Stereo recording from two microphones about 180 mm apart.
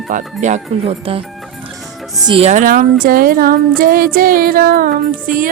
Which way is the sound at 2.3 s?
35° right (ahead or behind).